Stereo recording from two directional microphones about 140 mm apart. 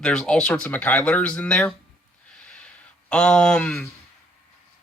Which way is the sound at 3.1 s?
5° left (ahead or behind).